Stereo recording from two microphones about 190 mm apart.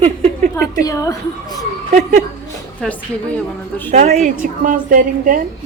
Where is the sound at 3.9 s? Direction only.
35° right (ahead or behind).